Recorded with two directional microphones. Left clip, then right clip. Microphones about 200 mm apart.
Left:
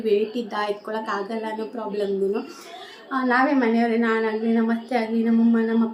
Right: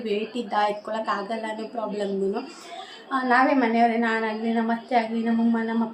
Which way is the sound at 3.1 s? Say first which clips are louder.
Even; 5° left (ahead or behind).